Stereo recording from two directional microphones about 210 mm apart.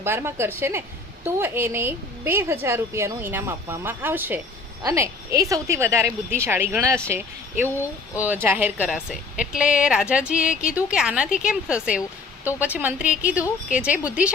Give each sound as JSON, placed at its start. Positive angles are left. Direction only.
{"t": 0.0, "sound": "a woman's voice", "side_deg": -10}